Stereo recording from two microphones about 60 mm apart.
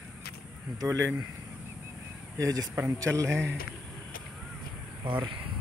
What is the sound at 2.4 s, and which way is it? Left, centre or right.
Speech, right.